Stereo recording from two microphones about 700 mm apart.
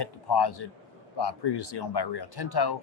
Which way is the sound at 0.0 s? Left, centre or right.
Left.